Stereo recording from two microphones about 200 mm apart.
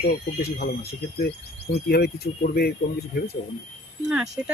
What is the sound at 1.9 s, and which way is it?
Speech, 50° left (ahead or behind).